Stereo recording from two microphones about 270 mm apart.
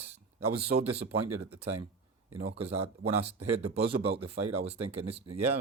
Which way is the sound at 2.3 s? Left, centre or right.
Right.